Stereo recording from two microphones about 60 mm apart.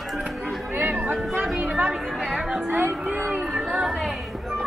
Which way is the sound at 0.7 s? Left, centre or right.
Right.